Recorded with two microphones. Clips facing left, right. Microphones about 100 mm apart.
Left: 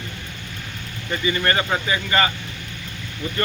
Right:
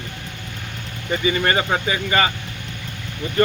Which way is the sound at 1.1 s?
20° right (ahead or behind).